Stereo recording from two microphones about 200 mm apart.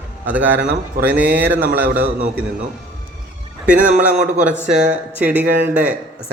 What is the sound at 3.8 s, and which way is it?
Speech, 35° right (ahead or behind).